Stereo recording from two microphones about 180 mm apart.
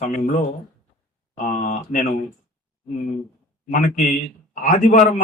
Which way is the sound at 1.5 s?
45° left (ahead or behind).